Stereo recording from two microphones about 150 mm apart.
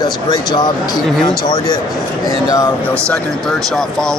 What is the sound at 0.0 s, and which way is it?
Speech, 30° left (ahead or behind).